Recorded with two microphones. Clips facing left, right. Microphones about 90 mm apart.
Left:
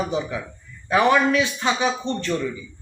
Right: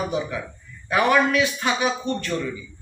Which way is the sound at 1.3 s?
25° left (ahead or behind).